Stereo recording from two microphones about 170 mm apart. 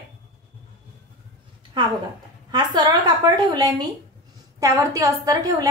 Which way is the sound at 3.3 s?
25° right (ahead or behind).